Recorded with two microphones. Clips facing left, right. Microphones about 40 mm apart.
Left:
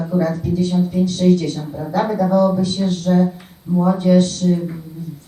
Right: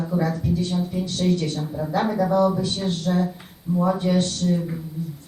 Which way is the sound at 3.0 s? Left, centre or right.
Centre.